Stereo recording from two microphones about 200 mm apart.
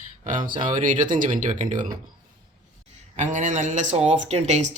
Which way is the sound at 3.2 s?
40° right (ahead or behind).